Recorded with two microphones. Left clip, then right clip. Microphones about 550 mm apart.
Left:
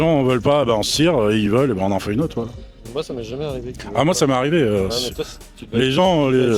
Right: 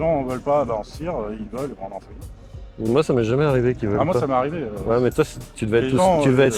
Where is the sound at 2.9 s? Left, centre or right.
Right.